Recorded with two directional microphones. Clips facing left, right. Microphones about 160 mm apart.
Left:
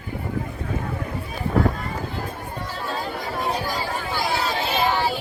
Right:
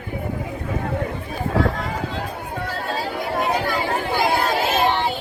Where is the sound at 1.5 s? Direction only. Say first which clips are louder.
Even; 90° right.